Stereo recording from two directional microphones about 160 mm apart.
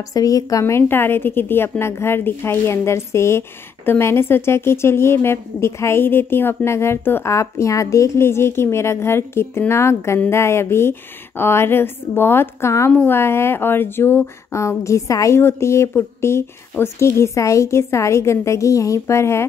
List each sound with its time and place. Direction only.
0.1 s a woman's voice: 20° left (ahead or behind)